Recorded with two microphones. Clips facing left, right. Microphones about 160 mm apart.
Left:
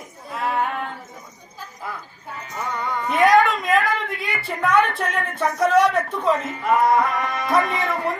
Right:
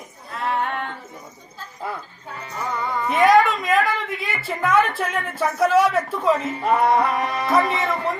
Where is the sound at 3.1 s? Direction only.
Centre (ahead or behind).